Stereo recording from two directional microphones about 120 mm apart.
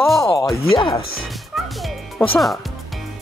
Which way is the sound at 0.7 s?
45° left (ahead or behind).